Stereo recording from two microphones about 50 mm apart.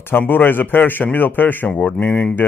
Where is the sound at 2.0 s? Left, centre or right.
Left.